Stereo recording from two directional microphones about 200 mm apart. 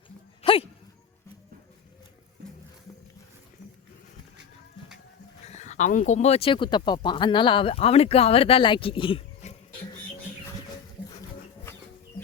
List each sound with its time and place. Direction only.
0.4 s dog: 25° left (ahead or behind)
5.5 s speech: 35° left (ahead or behind)